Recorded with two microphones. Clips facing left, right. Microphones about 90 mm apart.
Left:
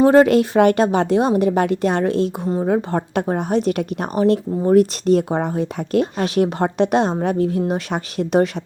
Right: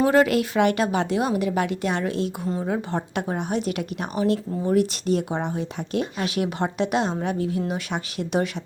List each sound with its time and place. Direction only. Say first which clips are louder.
0.0 s a woman's voice: left 7 dB; 35° left (ahead or behind)